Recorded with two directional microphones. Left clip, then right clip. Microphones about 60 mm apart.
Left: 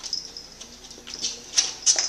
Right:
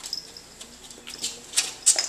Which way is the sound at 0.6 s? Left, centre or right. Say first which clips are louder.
Left 1 dB; centre.